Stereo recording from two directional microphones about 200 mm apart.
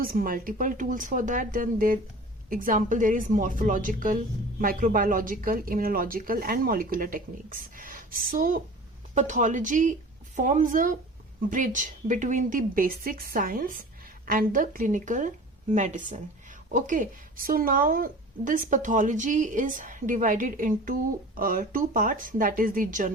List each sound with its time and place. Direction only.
0.0 s a woman's voice: 45° right (ahead or behind)